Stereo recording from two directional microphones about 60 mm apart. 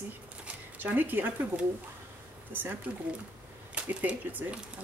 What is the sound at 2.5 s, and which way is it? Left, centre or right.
Speech, right.